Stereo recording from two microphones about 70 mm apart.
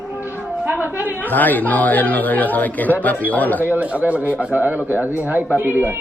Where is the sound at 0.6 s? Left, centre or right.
Right.